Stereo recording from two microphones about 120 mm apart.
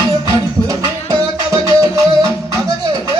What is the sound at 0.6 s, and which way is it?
Music, 30° right (ahead or behind).